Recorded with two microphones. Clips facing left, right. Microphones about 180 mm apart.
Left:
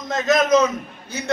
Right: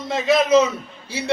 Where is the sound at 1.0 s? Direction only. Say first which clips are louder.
Right 2 dB; 30° right (ahead or behind).